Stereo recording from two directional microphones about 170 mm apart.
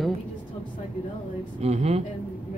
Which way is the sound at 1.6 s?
40° right (ahead or behind).